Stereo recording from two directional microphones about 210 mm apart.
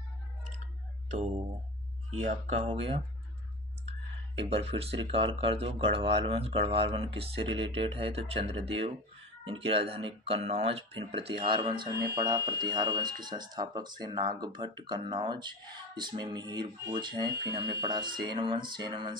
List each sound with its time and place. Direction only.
2.1 s speech: 35° right (ahead or behind)
4.4 s speech: 30° right (ahead or behind)